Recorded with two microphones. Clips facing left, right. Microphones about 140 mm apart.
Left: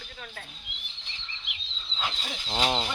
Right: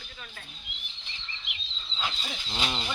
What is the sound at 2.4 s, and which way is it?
Speech, 40° left (ahead or behind).